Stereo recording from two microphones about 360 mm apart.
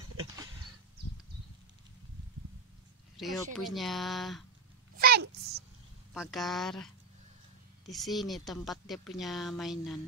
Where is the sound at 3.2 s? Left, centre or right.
Centre.